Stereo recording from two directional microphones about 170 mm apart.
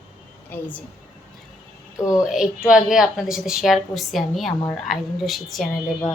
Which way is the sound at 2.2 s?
5° right (ahead or behind).